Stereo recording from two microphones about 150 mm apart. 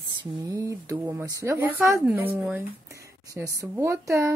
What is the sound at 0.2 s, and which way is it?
Speech, 20° right (ahead or behind).